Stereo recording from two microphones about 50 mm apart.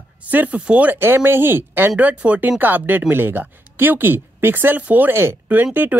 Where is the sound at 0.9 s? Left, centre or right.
Right.